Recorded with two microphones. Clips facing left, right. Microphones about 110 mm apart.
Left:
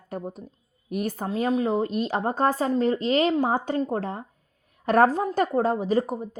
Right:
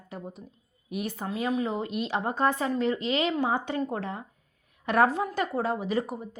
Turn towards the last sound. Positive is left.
turn(degrees=40)  # may be behind; listen again after turning